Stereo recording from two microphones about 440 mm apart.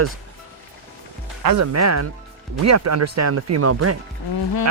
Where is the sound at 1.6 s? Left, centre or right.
Right.